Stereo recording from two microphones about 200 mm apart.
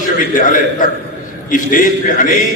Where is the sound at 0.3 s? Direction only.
45° left (ahead or behind).